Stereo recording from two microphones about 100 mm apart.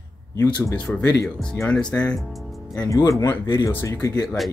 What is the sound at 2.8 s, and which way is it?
Speech, 35° left (ahead or behind).